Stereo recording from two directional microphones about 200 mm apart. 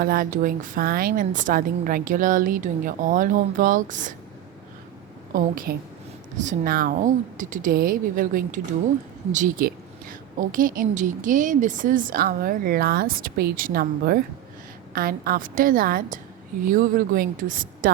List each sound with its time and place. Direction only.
0.0 s a woman's voice: 45° right (ahead or behind)
5.3 s a woman's voice: 45° right (ahead or behind)